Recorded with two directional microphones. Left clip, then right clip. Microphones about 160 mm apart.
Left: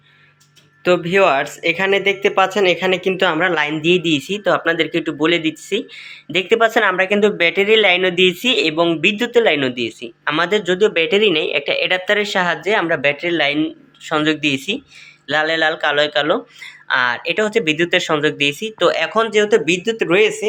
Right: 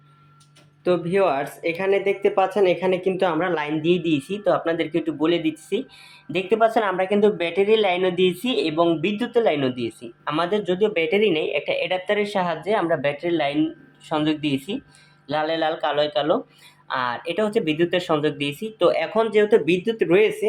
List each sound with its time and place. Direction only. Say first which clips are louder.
0.9 s speech: left 6 dB; centre (ahead or behind)